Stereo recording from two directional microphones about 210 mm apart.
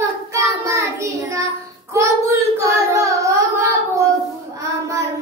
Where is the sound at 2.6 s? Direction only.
15° right (ahead or behind).